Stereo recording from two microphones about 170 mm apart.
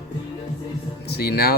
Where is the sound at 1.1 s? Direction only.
70° left (ahead or behind).